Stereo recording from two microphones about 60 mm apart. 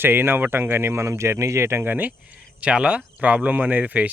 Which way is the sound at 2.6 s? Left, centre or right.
Centre.